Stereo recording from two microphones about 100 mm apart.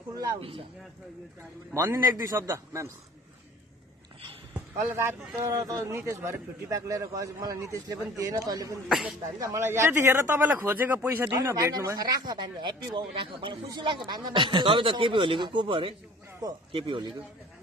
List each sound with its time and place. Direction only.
0.4 s speech: 65° right (ahead or behind)
1.7 s a man's voice: 30° right (ahead or behind)
4.6 s a man's voice: 25° right (ahead or behind)
8.8 s speech: 5° right (ahead or behind)
9.4 s a man's voice: 30° right (ahead or behind)
11.6 s speech: 35° right (ahead or behind); by 15.9 s 60° right (ahead or behind)
16.4 s speech: 40° right (ahead or behind)
16.7 s speech: 60° right (ahead or behind)